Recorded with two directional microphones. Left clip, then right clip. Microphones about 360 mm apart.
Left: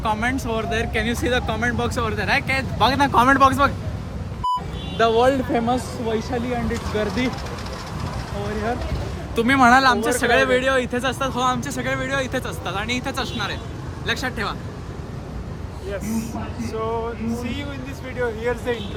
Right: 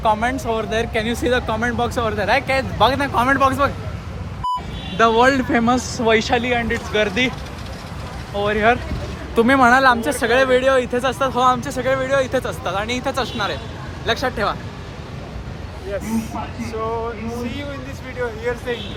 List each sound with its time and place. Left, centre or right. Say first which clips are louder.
0.0 s speech: right 4 dB; centre
4.9 s speech: right 3 dB; centre
6.1 s speech: right 7 dB; centre
9.3 s speech: right 4 dB; centre
9.6 s speech: even; centre
17.4 s speech: right 2 dB; centre